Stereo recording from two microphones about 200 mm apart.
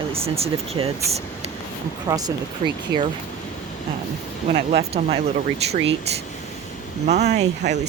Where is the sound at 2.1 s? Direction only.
20° right (ahead or behind).